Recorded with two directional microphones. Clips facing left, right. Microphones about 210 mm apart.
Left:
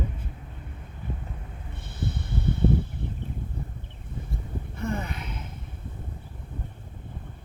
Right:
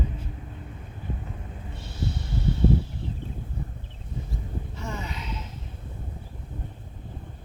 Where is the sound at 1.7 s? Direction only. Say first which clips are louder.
Even; 55° left (ahead or behind).